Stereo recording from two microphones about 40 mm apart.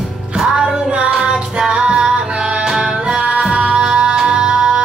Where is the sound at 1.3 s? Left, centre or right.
Centre.